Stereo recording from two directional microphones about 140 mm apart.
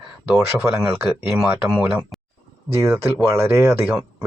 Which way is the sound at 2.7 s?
20° right (ahead or behind).